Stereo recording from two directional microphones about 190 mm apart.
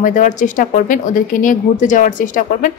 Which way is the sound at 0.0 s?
45° left (ahead or behind).